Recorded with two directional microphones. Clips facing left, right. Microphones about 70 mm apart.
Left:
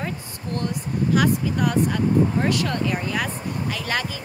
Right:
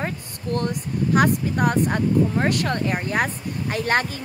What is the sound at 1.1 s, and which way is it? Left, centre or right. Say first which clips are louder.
Speech: right 2 dB; right.